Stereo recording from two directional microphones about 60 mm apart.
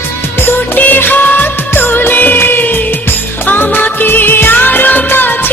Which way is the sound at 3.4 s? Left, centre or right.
Left.